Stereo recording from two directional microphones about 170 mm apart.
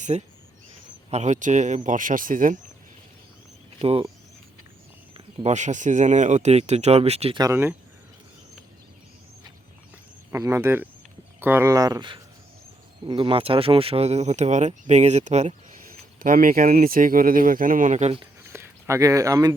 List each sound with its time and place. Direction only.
0.0 s speech: 40° right (ahead or behind)
3.8 s speech: 35° right (ahead or behind)
5.1 s speech: 40° right (ahead or behind)
7.3 s speech: 15° right (ahead or behind)
10.3 s speech: 15° right (ahead or behind); by 15.8 s 40° right (ahead or behind)
16.2 s speech: 55° right (ahead or behind); by 18.3 s 35° right (ahead or behind)
18.5 s speech: 15° right (ahead or behind)